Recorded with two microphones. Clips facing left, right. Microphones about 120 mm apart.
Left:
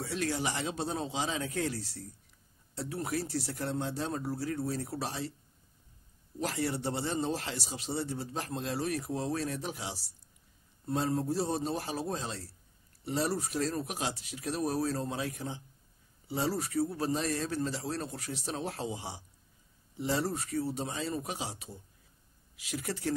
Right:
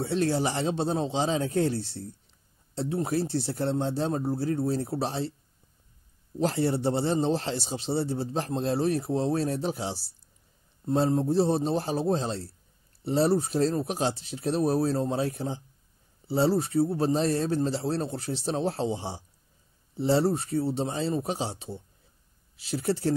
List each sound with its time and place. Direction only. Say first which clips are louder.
0.0 s speech: right 7 dB; 30° right (ahead or behind)
6.4 s speech: right 8 dB; 30° right (ahead or behind)